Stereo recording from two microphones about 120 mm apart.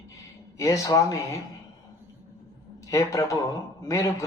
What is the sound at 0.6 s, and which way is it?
Speech, 30° left (ahead or behind).